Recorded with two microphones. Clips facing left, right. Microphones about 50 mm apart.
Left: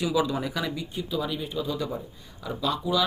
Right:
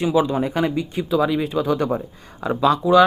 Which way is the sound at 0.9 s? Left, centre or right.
Right.